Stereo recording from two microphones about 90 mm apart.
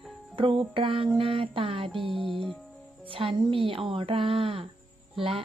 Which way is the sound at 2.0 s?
70° right (ahead or behind).